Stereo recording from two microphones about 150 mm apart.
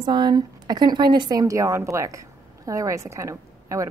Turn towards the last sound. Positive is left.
turn(degrees=-20)  # may be behind; listen again after turning